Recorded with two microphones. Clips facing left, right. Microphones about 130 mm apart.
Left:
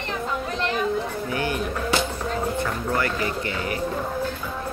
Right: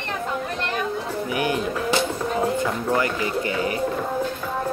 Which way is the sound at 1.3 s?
20° right (ahead or behind).